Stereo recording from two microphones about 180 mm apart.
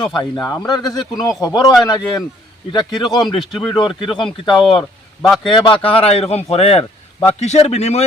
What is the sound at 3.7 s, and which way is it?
Speech, 25° left (ahead or behind).